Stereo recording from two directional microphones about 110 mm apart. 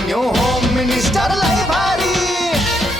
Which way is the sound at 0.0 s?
Centre (ahead or behind).